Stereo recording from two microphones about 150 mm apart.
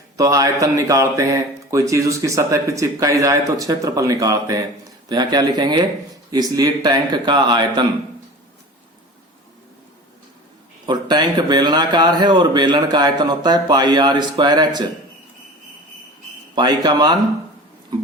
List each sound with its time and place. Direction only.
0.2 s speech: 20° right (ahead or behind)
10.8 s speech: 30° right (ahead or behind)
16.6 s speech: 30° right (ahead or behind)